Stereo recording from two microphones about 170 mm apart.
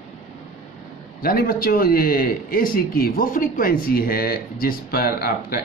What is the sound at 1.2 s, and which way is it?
A man's voice, 60° left (ahead or behind).